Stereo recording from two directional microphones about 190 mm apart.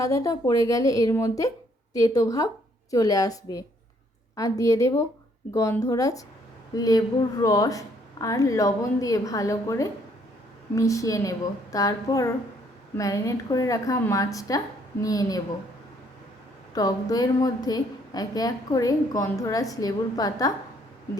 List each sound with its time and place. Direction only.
0.0 s a woman's voice: 15° left (ahead or behind)
16.7 s a woman's voice: 20° left (ahead or behind)